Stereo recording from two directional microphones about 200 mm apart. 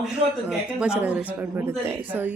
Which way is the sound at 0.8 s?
5° right (ahead or behind).